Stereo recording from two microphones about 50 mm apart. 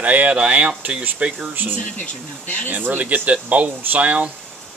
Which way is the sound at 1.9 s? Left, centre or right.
Left.